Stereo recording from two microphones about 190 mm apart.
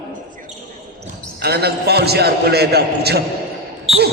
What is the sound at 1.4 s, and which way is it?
A man's voice, 55° right (ahead or behind).